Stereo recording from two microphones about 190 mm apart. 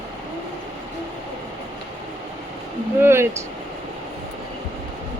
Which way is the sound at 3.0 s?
10° right (ahead or behind).